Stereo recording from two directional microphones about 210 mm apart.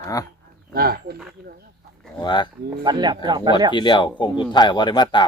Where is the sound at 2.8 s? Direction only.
20° right (ahead or behind).